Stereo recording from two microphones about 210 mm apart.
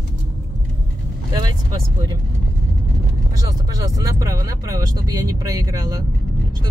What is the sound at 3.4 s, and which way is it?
Speech, 15° right (ahead or behind).